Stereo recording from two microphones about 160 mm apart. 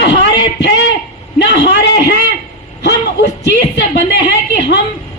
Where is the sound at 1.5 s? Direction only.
90° left.